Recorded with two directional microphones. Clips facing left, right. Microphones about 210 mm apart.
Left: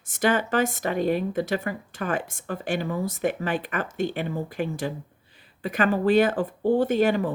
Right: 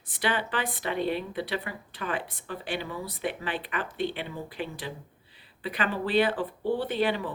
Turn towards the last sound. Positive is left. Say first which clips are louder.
# left 6 dB
turn(degrees=45)  # may be behind; listen again after turning